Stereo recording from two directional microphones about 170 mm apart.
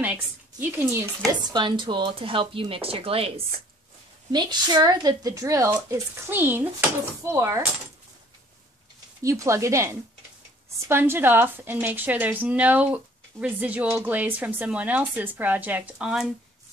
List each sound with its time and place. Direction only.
0.0 s a woman's voice: 10° right (ahead or behind)
1.5 s speech: 25° right (ahead or behind)
9.2 s a woman's voice: 20° right (ahead or behind)
10.9 s a woman's voice: 15° right (ahead or behind)